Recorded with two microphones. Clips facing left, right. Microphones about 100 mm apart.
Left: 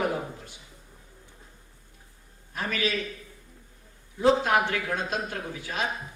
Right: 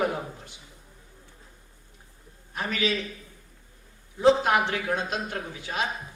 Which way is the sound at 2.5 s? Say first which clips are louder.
Right 1 dB; 25° right (ahead or behind).